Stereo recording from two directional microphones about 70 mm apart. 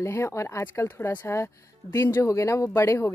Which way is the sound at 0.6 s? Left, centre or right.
Left.